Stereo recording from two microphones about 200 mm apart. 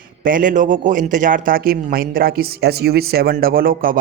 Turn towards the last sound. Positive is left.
turn(degrees=-45)  # may be behind; listen again after turning